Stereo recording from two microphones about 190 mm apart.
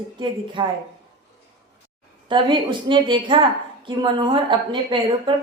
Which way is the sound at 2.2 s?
25° right (ahead or behind).